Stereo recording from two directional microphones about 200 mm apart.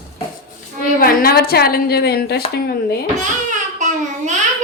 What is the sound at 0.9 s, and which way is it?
A woman's voice, 45° left (ahead or behind).